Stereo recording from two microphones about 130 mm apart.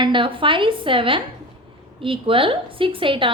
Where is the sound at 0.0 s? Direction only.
40° right (ahead or behind).